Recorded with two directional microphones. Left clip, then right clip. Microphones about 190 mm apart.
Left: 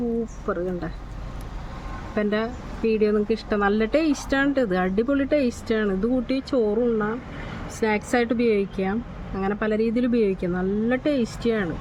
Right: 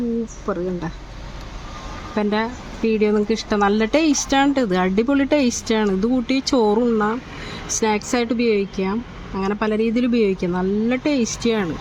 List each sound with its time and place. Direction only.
0.5 s speech: 30° right (ahead or behind)
2.1 s speech: 30° right (ahead or behind)